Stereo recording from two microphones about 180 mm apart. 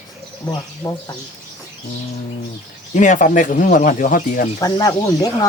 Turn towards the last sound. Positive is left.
turn(degrees=20)  # may be behind; listen again after turning